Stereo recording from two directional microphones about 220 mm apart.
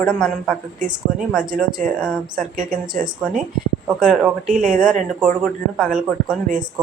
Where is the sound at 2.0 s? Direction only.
5° right (ahead or behind).